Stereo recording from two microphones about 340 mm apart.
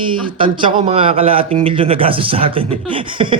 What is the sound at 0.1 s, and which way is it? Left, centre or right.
Speech, centre.